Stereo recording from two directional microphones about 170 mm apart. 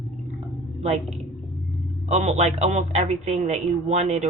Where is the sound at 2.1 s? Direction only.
40° right (ahead or behind).